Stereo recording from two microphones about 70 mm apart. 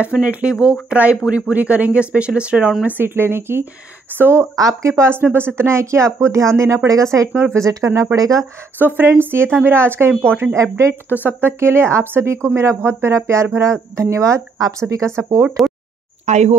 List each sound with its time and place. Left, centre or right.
0.0 s speech: centre
2.8 s speech: right
4.6 s speech: right
5.2 s speech: right
8.7 s speech: right
11.1 s speech: right
15.6 s a sound: right